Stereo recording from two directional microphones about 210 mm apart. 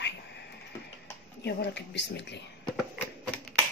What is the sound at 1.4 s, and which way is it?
Speech, 55° left (ahead or behind).